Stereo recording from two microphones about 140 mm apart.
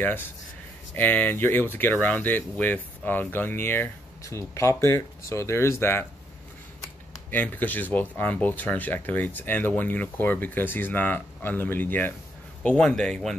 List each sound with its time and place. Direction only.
0.9 s speech: 15° left (ahead or behind)
7.2 s speech: 15° left (ahead or behind)